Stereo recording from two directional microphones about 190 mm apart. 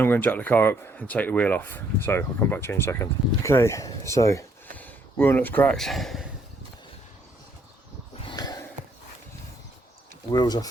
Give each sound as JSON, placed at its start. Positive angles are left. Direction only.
{"t": 0.0, "sound": "speech", "side_deg": 10}
{"t": 8.2, "sound": "a sound", "side_deg": 25}
{"t": 10.3, "sound": "speech", "side_deg": 20}